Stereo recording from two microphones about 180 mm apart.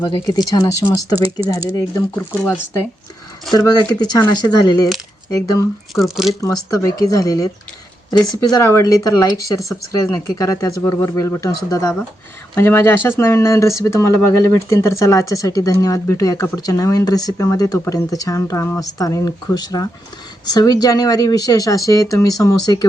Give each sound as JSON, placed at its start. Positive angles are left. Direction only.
{"t": 0.0, "sound": "speech", "side_deg": 20}
{"t": 3.5, "sound": "speech", "side_deg": 20}
{"t": 5.9, "sound": "speech", "side_deg": 0}
{"t": 6.4, "sound": "speech", "side_deg": 20}
{"t": 8.1, "sound": "speech", "side_deg": 0}
{"t": 8.4, "sound": "speech", "side_deg": 20}